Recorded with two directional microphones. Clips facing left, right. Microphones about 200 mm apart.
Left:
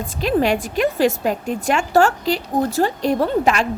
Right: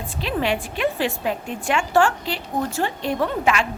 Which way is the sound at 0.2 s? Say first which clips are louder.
Left 6 dB; 45° left (ahead or behind).